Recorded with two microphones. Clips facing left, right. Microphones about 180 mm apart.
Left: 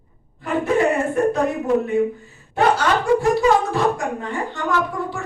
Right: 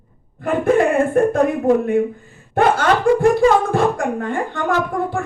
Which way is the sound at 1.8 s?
50° right (ahead or behind).